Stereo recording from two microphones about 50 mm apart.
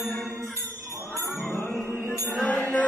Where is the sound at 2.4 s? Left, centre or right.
Left.